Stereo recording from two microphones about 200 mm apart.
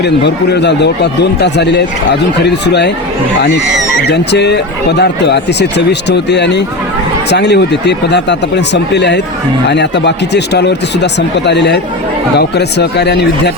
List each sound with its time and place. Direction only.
0.0 s speech: 55° left (ahead or behind)
4.0 s speech: 60° left (ahead or behind)